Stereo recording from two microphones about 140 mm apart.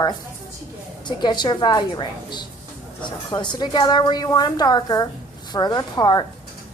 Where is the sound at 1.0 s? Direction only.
30° left (ahead or behind).